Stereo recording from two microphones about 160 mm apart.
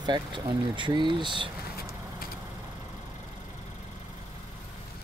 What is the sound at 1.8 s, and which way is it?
Vehicle, 75° left (ahead or behind).